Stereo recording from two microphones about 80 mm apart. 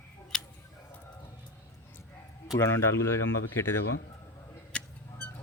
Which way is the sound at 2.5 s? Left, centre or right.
Left.